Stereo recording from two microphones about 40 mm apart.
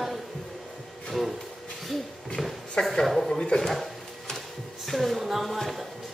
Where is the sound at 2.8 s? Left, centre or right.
Left.